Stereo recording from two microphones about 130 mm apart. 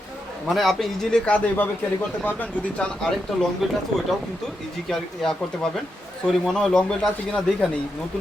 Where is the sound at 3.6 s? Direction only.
Centre (ahead or behind).